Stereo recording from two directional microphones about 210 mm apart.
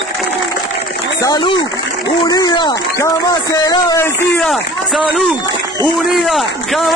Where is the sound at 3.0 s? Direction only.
15° left (ahead or behind).